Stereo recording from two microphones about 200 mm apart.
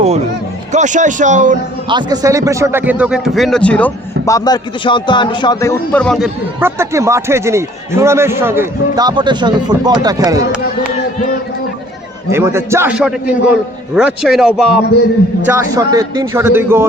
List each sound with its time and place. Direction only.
0.7 s speech: 35° right (ahead or behind)
1.9 s speech: 20° right (ahead or behind)
10.6 s speech: 45° left (ahead or behind)
12.3 s a man's voice: 15° right (ahead or behind)
15.7 s speech: 20° right (ahead or behind)